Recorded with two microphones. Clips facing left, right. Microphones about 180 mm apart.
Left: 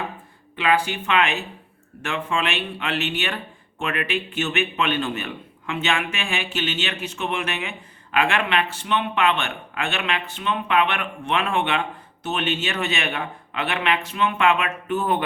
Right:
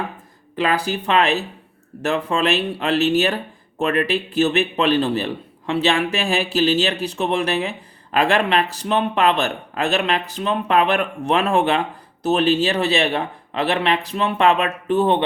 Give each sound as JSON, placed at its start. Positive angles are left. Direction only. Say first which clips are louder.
{"t": 0.5, "sound": "speech", "louder": "right 1 dB", "side_deg": -40}